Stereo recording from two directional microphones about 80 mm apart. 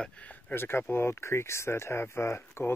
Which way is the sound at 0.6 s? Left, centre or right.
Left.